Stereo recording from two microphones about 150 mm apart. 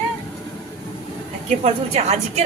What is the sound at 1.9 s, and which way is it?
Speech, 45° right (ahead or behind).